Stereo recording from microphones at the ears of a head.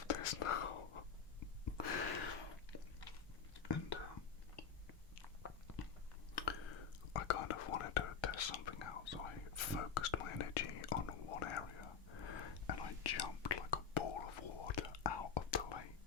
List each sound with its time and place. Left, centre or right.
0.0 s whispering: left
6.3 s whispering: left